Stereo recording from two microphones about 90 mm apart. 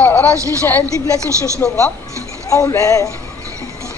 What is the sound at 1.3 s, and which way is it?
Speech, 35° right (ahead or behind).